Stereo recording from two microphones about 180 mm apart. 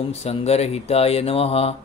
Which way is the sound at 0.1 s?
35° left (ahead or behind).